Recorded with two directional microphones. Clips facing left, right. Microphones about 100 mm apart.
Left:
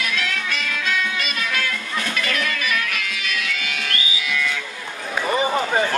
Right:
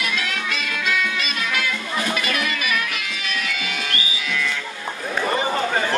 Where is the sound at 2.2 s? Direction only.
15° right (ahead or behind).